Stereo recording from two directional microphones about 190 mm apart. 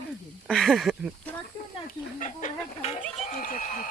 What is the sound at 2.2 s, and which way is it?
Speech, 40° left (ahead or behind).